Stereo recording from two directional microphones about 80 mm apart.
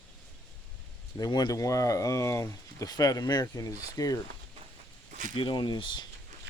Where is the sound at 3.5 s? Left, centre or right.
Left.